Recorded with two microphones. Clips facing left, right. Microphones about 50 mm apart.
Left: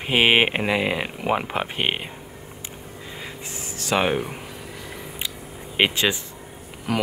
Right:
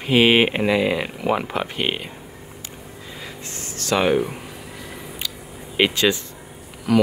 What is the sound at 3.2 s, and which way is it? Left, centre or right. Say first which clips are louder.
Speech: right 1 dB; centre.